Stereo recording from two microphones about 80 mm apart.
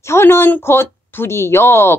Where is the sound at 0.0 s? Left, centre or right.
Left.